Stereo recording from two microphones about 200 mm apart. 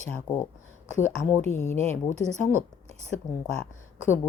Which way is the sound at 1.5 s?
35° left (ahead or behind).